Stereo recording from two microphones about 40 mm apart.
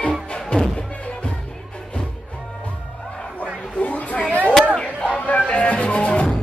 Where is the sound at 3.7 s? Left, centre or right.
Left.